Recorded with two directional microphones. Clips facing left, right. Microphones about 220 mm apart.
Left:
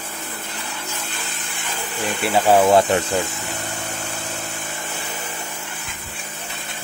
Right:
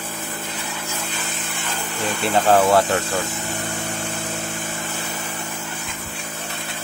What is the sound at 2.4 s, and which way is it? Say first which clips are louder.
Speech: left 2 dB; 15° left (ahead or behind).